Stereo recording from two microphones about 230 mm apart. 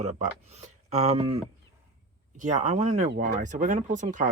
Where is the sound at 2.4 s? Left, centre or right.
Right.